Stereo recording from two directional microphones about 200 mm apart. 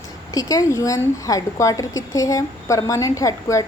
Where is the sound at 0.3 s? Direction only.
15° left (ahead or behind).